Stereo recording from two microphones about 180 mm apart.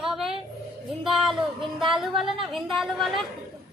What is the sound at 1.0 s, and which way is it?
Speech, centre (ahead or behind).